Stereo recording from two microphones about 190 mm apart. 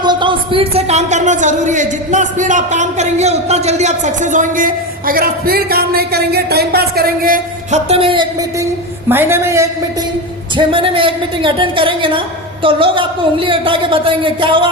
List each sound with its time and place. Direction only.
0.0 s speech: 25° right (ahead or behind); by 7.8 s 45° right (ahead or behind)
7.9 s speech: 30° right (ahead or behind)
9.0 s a woman's voice: 10° right (ahead or behind)
10.6 s speech: 25° right (ahead or behind)